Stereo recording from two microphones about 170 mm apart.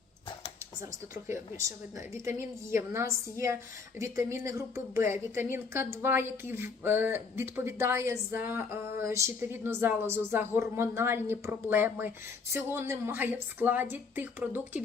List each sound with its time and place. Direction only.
1.3 s a woman's voice: 15° right (ahead or behind)